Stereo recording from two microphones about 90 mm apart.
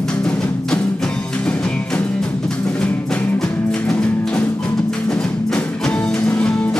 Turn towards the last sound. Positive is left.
turn(degrees=10)  # may be behind; listen again after turning